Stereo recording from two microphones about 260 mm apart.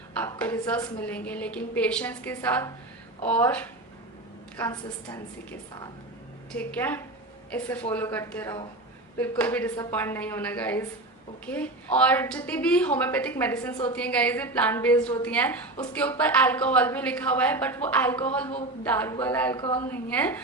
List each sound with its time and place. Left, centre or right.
0.2 s a woman's voice: centre
6.5 s a woman's voice: centre